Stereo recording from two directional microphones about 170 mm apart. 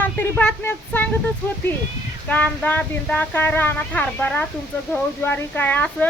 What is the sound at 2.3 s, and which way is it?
Speech, 10° left (ahead or behind).